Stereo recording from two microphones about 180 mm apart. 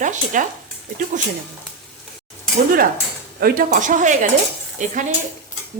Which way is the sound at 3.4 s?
50° right (ahead or behind).